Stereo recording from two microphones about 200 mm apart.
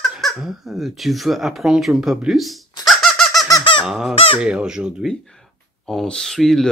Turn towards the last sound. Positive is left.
turn(degrees=0)  # may be behind; listen again after turning